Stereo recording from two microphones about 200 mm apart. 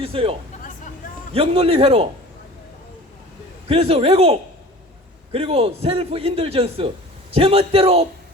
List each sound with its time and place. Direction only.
0.0 s a man's voice: 30° right (ahead or behind)
3.7 s a man's voice: 30° right (ahead or behind)